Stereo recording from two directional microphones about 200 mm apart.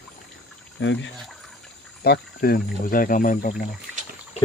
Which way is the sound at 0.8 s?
65° left (ahead or behind).